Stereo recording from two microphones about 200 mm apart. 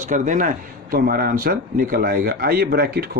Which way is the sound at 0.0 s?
40° right (ahead or behind).